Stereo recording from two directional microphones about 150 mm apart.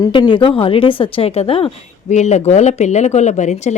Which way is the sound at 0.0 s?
30° left (ahead or behind).